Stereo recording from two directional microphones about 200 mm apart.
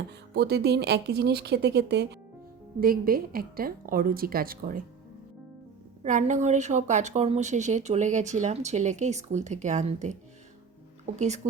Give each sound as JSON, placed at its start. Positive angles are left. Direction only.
{"t": 0.1, "sound": "a woman's voice", "side_deg": -55}
{"t": 6.0, "sound": "a woman's voice", "side_deg": -35}